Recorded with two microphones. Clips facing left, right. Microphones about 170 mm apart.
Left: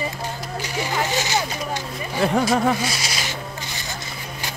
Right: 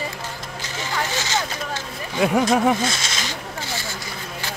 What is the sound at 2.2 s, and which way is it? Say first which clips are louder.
Speech: right 1 dB; 10° right (ahead or behind).